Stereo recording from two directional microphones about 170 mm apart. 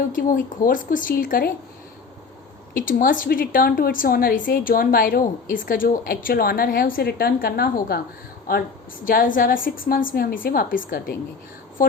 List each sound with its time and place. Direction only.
0.1 s a woman's voice: 55° left (ahead or behind)
2.7 s a woman's voice: 55° left (ahead or behind)
9.0 s a woman's voice: 55° left (ahead or behind)